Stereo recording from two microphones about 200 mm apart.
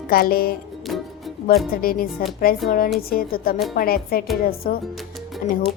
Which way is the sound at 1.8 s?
45° left (ahead or behind).